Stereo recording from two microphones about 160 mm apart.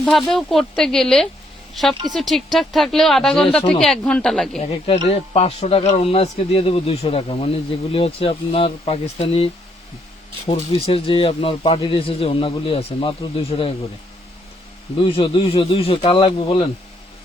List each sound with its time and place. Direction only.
0.0 s a woman's voice: centre (ahead or behind)
4.9 s speech: 40° left (ahead or behind)
15.0 s speech: 30° left (ahead or behind)